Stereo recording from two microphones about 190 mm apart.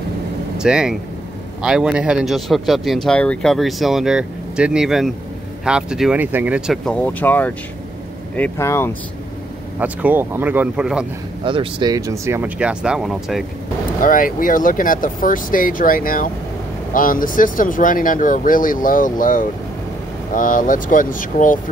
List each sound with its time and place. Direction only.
0.6 s speech: 5° right (ahead or behind); by 8.9 s 15° left (ahead or behind)
9.8 s speech: 10° right (ahead or behind)
11.4 s speech: 25° right (ahead or behind); by 13.5 s centre (ahead or behind)
14.0 s speech: 45° left (ahead or behind)